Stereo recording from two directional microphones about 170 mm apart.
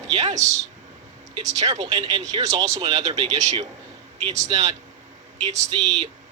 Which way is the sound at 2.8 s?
35° right (ahead or behind).